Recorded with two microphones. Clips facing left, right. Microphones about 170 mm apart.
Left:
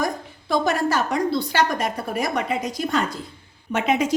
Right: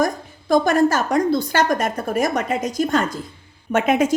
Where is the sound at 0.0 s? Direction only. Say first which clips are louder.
Right 5 dB; 45° right (ahead or behind).